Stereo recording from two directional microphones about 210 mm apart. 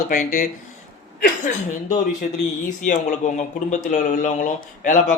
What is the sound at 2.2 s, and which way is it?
A man's voice, 35° left (ahead or behind).